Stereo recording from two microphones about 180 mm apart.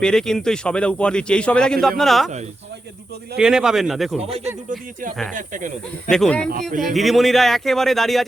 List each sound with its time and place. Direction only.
0.0 s speech: 5° left (ahead or behind)
3.3 s speech: 5° right (ahead or behind)
4.2 s speech: 35° right (ahead or behind)
5.3 s speech: 45° right (ahead or behind)
6.1 s speech: 5° left (ahead or behind)